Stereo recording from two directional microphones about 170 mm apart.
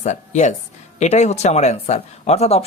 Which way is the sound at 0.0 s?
45° left (ahead or behind).